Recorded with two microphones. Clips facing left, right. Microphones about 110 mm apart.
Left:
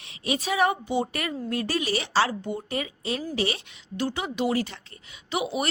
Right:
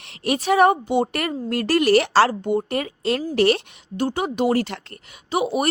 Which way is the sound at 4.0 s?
45° right (ahead or behind).